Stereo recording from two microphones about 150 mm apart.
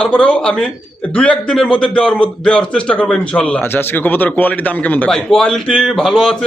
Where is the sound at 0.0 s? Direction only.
5° left (ahead or behind).